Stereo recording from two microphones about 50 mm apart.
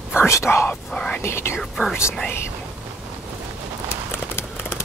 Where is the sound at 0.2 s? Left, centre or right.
Left.